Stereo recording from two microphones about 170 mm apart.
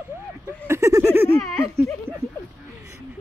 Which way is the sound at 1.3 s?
20° left (ahead or behind).